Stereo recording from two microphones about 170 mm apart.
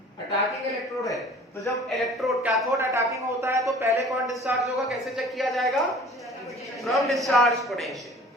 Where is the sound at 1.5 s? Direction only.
20° left (ahead or behind).